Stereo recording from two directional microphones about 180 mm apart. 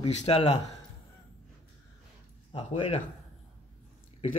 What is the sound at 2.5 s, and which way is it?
Speech, 30° left (ahead or behind).